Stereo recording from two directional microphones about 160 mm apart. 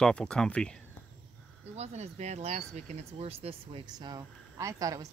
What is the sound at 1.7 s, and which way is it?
Speech, 40° right (ahead or behind).